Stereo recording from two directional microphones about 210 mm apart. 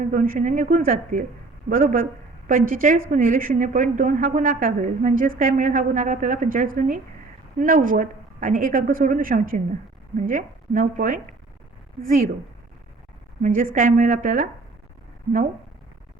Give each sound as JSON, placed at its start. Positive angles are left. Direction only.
{"t": 0.0, "sound": "a woman's voice", "side_deg": -40}
{"t": 13.4, "sound": "a woman's voice", "side_deg": -40}